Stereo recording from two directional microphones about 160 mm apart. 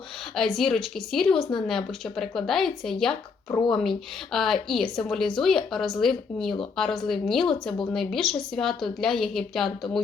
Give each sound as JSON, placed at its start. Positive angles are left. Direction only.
{"t": 0.3, "sound": "a woman's voice", "side_deg": 0}